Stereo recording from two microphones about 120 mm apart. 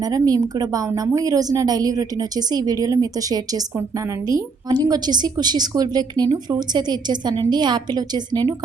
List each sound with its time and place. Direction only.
0.0 s a woman's voice: 30° right (ahead or behind)